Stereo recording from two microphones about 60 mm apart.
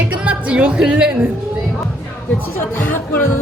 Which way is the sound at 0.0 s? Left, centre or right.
Right.